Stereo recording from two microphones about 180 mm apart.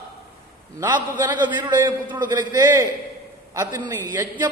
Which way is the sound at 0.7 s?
10° right (ahead or behind).